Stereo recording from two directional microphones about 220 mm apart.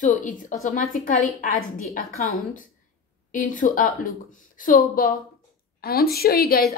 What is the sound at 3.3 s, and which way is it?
A woman's voice, 35° left (ahead or behind).